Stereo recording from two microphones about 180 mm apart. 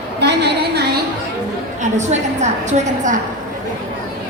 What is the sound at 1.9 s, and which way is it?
A woman's voice, 40° right (ahead or behind).